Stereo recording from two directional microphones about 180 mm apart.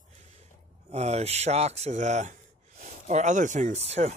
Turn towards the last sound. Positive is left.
turn(degrees=-35)  # may be behind; listen again after turning